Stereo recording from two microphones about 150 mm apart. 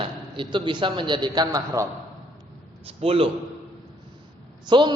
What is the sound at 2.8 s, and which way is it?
Speech, 40° right (ahead or behind).